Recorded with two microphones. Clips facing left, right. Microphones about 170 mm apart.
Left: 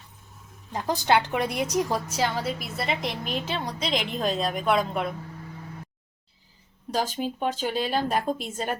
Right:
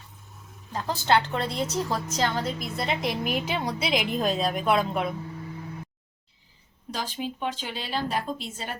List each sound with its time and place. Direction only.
0.7 s a woman's voice: 15° left (ahead or behind); by 5.1 s centre (ahead or behind)
6.9 s speech: 40° left (ahead or behind)